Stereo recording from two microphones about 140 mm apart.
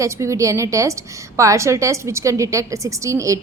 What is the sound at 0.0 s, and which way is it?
A woman's voice, 20° right (ahead or behind).